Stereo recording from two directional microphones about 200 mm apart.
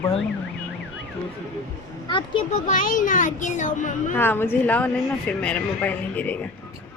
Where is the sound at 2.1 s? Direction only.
35° left (ahead or behind).